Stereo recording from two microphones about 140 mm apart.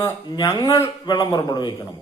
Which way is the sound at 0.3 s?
30° left (ahead or behind).